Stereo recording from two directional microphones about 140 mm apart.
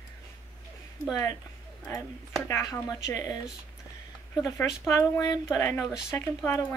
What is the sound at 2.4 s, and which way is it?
Speech, 20° left (ahead or behind).